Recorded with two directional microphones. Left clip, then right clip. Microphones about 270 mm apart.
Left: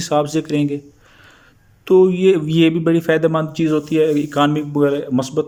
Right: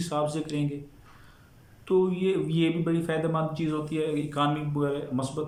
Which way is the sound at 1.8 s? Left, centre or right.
Left.